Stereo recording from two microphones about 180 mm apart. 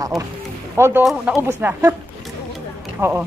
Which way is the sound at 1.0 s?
Centre (ahead or behind).